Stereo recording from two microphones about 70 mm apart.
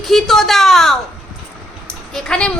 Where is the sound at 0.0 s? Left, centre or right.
Centre.